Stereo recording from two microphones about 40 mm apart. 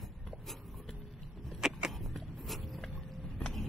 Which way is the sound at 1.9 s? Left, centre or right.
Centre.